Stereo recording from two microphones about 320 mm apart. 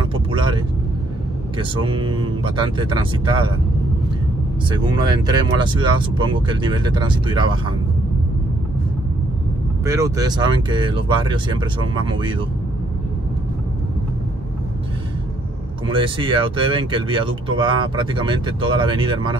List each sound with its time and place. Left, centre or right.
0.1 s vehicle: centre
1.6 s speech: centre
4.6 s speech: centre
9.8 s speech: centre
15.9 s speech: centre